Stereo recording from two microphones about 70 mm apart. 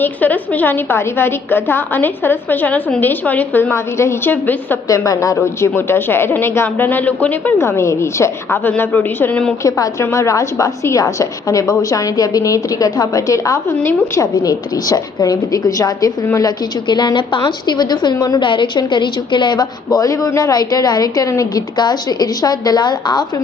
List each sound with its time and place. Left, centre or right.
0.0 s a woman's voice: left
4.9 s a woman's voice: left
7.6 s a woman's voice: left
8.6 s a woman's voice: left
9.6 s a woman's voice: left
16.4 s a woman's voice: left
21.8 s a woman's voice: left